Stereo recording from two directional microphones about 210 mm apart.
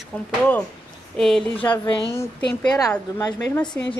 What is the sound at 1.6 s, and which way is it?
Speech, 25° left (ahead or behind).